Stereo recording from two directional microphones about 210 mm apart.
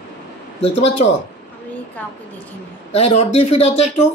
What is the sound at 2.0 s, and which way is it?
Speech, 5° left (ahead or behind).